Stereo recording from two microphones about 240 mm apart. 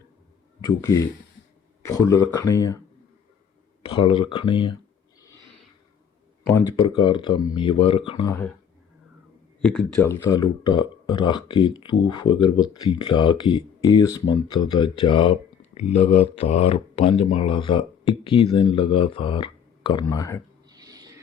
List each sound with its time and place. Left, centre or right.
0.6 s speech: centre
3.8 s speech: left
6.8 s speech: centre
9.6 s speech: centre
20.7 s a sound: centre